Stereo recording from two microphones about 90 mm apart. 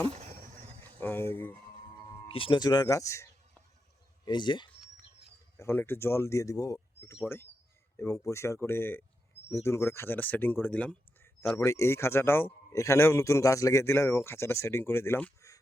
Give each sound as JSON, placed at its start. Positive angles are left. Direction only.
{"t": 0.9, "sound": "a sound", "side_deg": 20}
{"t": 2.2, "sound": "speech", "side_deg": 85}
{"t": 2.6, "sound": "speech", "side_deg": 50}
{"t": 4.3, "sound": "speech", "side_deg": 60}
{"t": 5.5, "sound": "speech", "side_deg": 25}
{"t": 6.7, "sound": "bird", "side_deg": 30}
{"t": 7.9, "sound": "speech", "side_deg": 35}
{"t": 11.5, "sound": "speech", "side_deg": 35}
{"t": 15.4, "sound": "a sound", "side_deg": 40}